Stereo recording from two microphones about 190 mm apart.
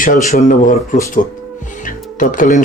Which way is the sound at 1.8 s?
45° left (ahead or behind).